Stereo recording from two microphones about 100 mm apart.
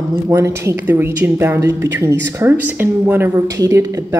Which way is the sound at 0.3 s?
25° right (ahead or behind).